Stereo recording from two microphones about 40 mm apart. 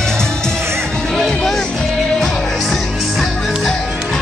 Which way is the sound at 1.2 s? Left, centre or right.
Centre.